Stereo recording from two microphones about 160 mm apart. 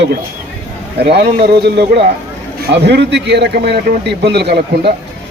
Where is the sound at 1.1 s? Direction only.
90° right.